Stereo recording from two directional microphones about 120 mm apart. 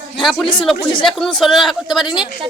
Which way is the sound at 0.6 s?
Centre (ahead or behind).